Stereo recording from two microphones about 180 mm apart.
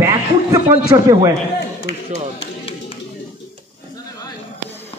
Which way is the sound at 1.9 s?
75° left (ahead or behind).